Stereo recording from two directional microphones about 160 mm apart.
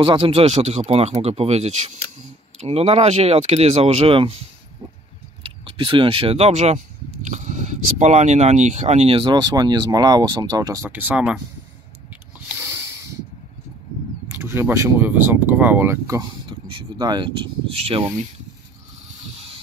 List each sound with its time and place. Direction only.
0.0 s speech: 35° right (ahead or behind)
5.4 s speech: 30° right (ahead or behind)
10.9 s speech: 10° right (ahead or behind)
12.4 s a sound: 10° right (ahead or behind)
14.3 s speech: 15° right (ahead or behind)
16.2 s speech: 30° right (ahead or behind)
19.3 s vehicle: 35° right (ahead or behind)